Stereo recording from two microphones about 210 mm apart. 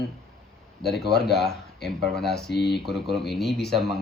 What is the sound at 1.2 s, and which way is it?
Speech, centre (ahead or behind).